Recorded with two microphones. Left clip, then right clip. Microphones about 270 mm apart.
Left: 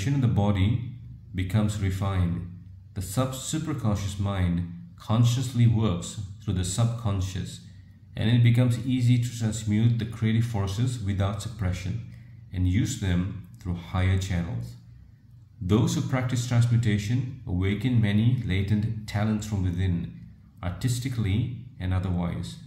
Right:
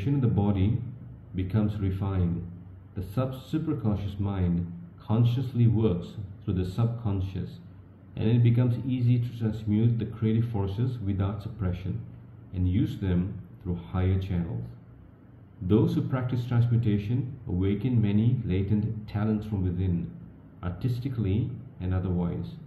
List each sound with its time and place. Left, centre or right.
0.0 s a man's voice: left
15.6 s a man's voice: left
20.6 s a man's voice: left